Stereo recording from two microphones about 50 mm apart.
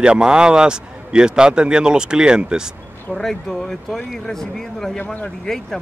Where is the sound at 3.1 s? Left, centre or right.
Centre.